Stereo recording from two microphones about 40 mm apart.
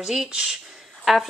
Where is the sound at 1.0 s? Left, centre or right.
Centre.